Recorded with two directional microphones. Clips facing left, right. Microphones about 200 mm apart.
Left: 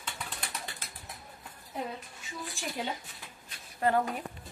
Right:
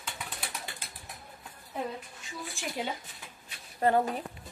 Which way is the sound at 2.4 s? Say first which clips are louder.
Right 1 dB; centre (ahead or behind).